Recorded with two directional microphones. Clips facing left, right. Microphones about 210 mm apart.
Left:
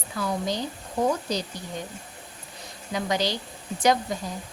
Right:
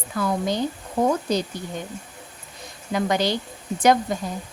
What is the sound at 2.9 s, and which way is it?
Speech, 55° right (ahead or behind).